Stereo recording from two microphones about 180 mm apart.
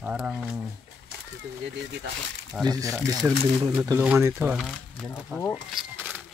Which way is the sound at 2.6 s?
20° right (ahead or behind).